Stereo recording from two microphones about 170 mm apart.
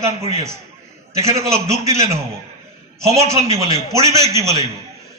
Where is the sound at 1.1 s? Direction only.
20° right (ahead or behind).